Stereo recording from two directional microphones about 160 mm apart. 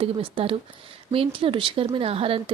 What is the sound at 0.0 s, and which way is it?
Speech, 35° right (ahead or behind).